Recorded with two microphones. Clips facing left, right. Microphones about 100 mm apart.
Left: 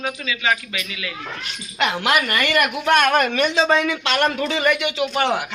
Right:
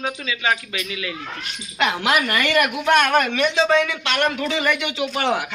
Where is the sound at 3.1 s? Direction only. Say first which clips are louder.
Left 1 dB; 5° left (ahead or behind).